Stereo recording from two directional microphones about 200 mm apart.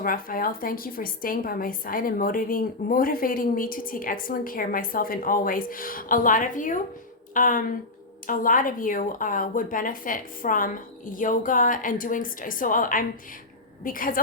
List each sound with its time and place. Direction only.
0.0 s a woman's voice: 45° left (ahead or behind)